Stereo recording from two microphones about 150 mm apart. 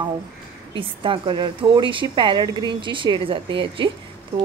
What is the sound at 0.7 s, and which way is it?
Speech, 35° right (ahead or behind).